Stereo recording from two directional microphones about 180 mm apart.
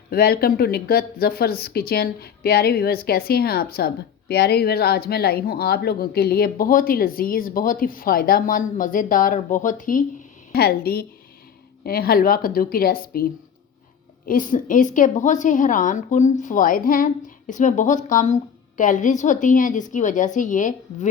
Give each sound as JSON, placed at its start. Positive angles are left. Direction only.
{"t": 0.1, "sound": "speech", "side_deg": 60}
{"t": 10.5, "sound": "speech", "side_deg": 60}
{"t": 14.3, "sound": "a woman's voice", "side_deg": 50}